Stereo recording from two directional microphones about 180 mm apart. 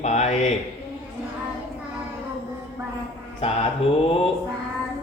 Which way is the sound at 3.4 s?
35° left (ahead or behind).